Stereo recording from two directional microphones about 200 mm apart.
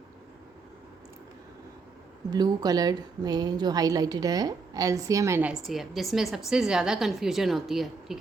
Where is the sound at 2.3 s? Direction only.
20° right (ahead or behind).